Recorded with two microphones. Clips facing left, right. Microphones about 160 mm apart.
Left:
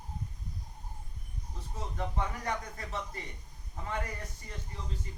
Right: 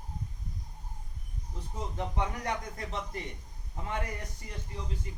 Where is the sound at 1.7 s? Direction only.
15° right (ahead or behind).